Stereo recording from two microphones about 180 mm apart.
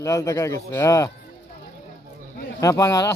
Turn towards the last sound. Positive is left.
turn(degrees=15)  # may be behind; listen again after turning